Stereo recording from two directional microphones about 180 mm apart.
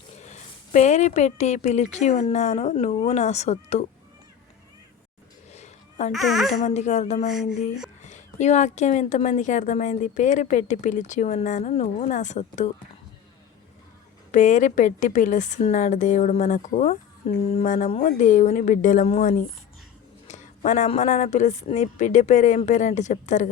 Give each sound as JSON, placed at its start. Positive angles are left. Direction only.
{"t": 0.2, "sound": "speech", "side_deg": 40}
{"t": 5.5, "sound": "a sound", "side_deg": 40}
{"t": 6.1, "sound": "speech", "side_deg": 0}
{"t": 6.5, "sound": "a woman's voice", "side_deg": 40}
{"t": 14.3, "sound": "a woman's voice", "side_deg": 45}